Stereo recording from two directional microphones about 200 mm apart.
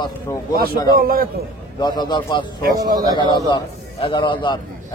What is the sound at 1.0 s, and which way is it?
Speech, 45° right (ahead or behind).